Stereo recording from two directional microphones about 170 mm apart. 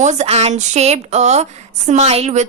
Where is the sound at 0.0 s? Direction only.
45° right (ahead or behind).